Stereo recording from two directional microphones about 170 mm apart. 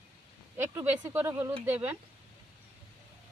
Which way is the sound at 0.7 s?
15° right (ahead or behind).